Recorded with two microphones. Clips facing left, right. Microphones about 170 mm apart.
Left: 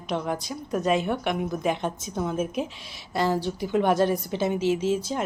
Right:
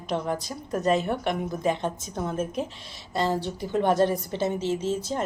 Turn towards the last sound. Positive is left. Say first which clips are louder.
# left 2 dB
turn(degrees=5)  # may be behind; listen again after turning